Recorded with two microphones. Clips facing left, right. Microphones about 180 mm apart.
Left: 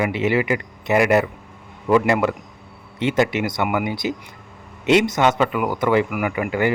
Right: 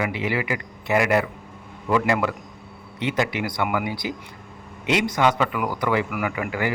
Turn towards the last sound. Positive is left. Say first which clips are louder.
# left 4 dB
turn(degrees=25)  # may be behind; listen again after turning